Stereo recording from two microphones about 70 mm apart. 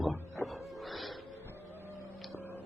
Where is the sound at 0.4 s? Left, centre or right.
Centre.